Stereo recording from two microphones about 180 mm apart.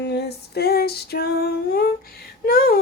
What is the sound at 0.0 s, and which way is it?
Female singing, 70° left (ahead or behind).